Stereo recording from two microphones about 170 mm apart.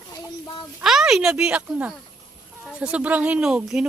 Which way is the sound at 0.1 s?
25° left (ahead or behind).